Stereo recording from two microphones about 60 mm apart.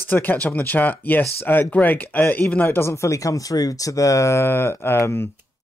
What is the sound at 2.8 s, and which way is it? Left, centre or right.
Speech, left.